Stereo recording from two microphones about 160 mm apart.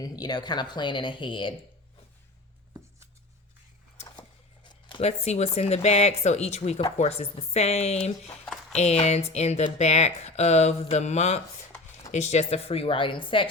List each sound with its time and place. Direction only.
0.0 s speech: 25° left (ahead or behind)
4.2 s a sound: 30° left (ahead or behind)
5.0 s speech: 40° left (ahead or behind)